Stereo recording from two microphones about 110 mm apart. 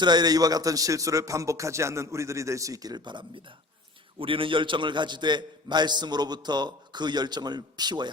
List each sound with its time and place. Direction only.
0.0 s a man's voice: 40° right (ahead or behind)